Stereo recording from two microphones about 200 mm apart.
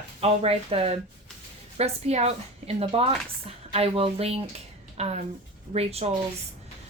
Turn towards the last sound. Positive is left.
turn(degrees=-30)  # may be behind; listen again after turning